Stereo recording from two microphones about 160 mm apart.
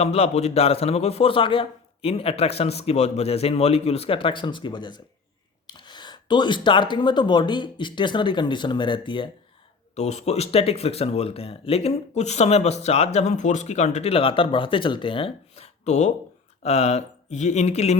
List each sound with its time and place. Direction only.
0.0 s speech: 40° left (ahead or behind)
9.9 s speech: 45° left (ahead or behind)